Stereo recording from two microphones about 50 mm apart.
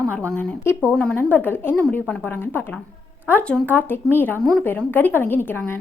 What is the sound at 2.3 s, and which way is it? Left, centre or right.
A woman's voice, left.